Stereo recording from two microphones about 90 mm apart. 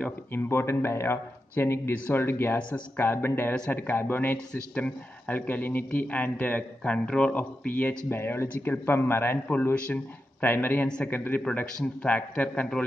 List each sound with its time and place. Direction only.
0.3 s a man's voice: 25° left (ahead or behind)